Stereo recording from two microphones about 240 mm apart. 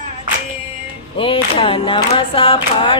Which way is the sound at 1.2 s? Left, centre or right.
Left.